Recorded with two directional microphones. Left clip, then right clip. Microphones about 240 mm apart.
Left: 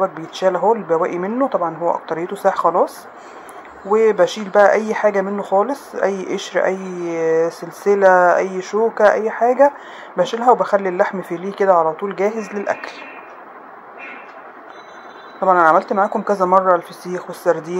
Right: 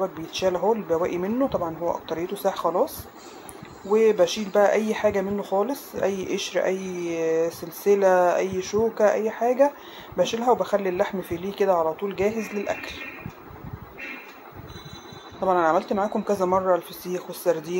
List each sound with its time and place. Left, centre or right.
0.0 s speech: centre
3.9 s speech: centre
15.4 s speech: centre